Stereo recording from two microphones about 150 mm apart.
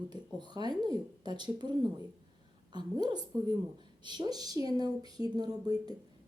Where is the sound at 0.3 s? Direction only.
30° right (ahead or behind).